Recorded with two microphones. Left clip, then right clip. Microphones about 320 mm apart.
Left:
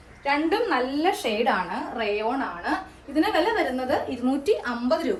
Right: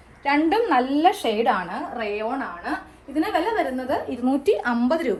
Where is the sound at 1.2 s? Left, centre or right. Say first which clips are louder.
Right 3 dB; right.